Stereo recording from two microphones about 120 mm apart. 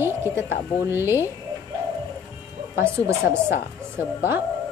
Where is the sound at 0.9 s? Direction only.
20° right (ahead or behind).